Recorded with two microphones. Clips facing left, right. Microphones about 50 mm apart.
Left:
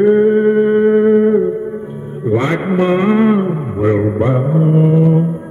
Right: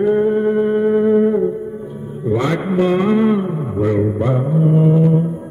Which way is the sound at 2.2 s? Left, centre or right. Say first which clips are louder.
Left 3 dB; left.